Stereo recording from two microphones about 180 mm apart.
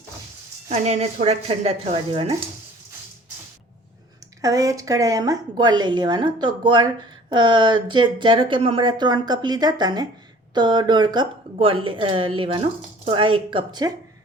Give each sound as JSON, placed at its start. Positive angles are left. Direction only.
{"t": 0.7, "sound": "speech", "side_deg": -35}
{"t": 4.4, "sound": "a woman's voice", "side_deg": -20}